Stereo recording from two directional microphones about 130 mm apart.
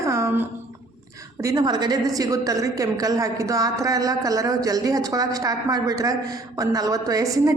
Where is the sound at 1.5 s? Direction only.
30° right (ahead or behind).